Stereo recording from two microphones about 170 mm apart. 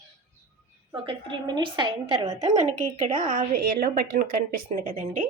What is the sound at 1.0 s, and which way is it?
A woman's voice, 25° right (ahead or behind).